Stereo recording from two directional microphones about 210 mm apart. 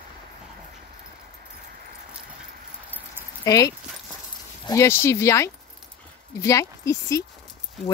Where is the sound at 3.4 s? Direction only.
15° left (ahead or behind).